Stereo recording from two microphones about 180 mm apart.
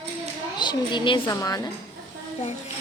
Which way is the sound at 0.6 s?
25° left (ahead or behind).